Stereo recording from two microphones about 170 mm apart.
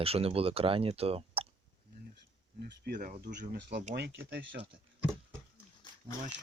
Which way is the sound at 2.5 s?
70° right (ahead or behind).